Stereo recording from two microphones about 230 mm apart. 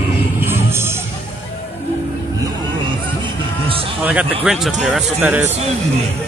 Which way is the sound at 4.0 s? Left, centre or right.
Centre.